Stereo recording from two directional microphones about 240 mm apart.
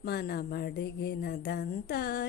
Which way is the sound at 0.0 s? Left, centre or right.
Left.